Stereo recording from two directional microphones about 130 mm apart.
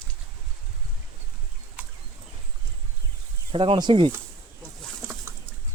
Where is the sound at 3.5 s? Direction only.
40° right (ahead or behind).